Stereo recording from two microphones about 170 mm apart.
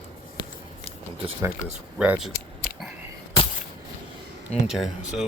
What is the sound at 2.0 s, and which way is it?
Speech, 5° right (ahead or behind).